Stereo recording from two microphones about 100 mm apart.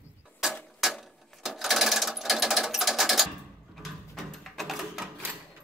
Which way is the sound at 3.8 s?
Centre (ahead or behind).